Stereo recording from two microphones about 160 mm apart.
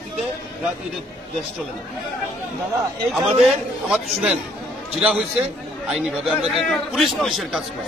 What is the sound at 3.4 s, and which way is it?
Speech, 5° right (ahead or behind).